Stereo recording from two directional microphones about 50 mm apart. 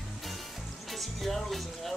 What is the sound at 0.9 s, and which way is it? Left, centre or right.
Speech, centre.